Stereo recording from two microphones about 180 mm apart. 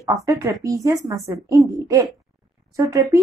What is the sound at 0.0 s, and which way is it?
Speech, 20° right (ahead or behind).